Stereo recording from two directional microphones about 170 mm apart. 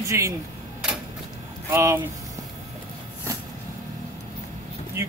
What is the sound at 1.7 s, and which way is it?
Speech, 15° right (ahead or behind).